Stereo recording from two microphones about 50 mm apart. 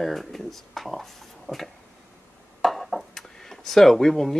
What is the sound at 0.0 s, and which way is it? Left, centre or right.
Speech, centre.